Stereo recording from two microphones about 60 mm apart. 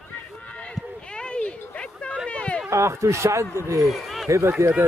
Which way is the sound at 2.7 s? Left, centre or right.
Right.